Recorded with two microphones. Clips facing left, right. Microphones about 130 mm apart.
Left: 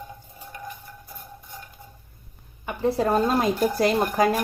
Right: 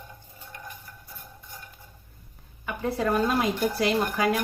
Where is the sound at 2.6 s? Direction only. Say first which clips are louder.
Left 4 dB; 30° left (ahead or behind).